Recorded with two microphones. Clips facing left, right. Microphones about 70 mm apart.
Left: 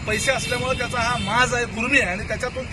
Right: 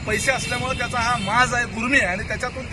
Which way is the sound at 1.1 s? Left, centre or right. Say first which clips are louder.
Right 1 dB; right.